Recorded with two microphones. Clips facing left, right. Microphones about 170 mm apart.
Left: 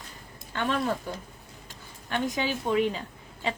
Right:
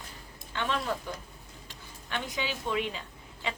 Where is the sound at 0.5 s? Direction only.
45° left (ahead or behind).